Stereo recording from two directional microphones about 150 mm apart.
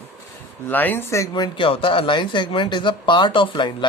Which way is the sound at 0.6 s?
10° left (ahead or behind).